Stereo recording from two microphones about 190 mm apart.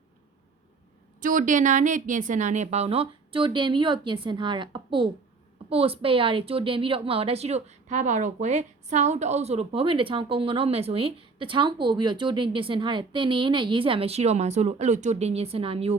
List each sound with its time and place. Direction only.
1.2 s a woman's voice: 45° right (ahead or behind)